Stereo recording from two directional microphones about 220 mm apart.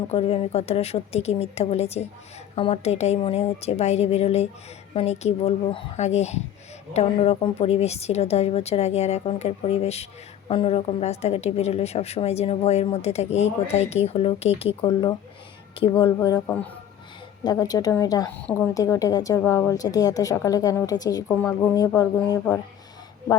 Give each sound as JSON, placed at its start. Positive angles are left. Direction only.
{"t": 0.1, "sound": "a woman's voice", "side_deg": 25}